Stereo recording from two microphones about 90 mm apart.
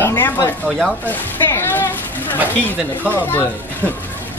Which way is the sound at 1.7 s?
20° left (ahead or behind).